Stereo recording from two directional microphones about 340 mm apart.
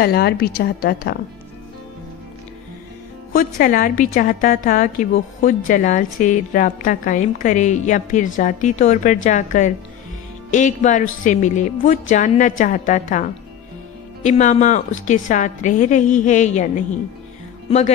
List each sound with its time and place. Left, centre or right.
0.0 s a woman's voice: left
3.3 s a woman's voice: left